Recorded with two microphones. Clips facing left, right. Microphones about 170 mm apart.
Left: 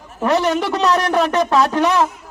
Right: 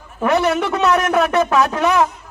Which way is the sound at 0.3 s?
35° left (ahead or behind).